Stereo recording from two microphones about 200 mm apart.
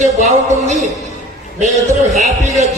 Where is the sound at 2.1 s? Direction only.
35° right (ahead or behind).